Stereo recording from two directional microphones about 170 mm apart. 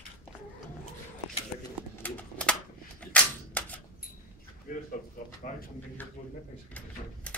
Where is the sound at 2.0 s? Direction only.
5° left (ahead or behind).